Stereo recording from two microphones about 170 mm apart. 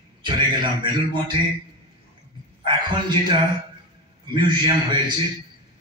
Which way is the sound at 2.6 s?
25° right (ahead or behind).